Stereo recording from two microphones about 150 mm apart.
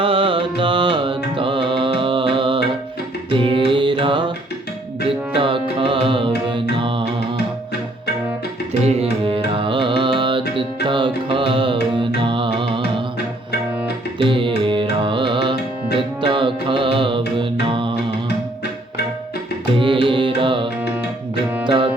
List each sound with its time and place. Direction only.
0.0 s music: 35° right (ahead or behind)
5.3 s music: 35° right (ahead or behind)
8.8 s music: 40° right (ahead or behind)
14.2 s music: 35° right (ahead or behind)
19.8 s music: 35° right (ahead or behind)